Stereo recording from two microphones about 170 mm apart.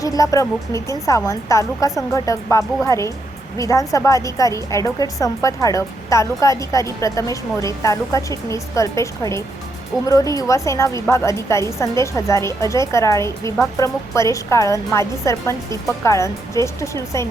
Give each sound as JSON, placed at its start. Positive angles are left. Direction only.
{"t": 0.0, "sound": "a woman's voice", "side_deg": 20}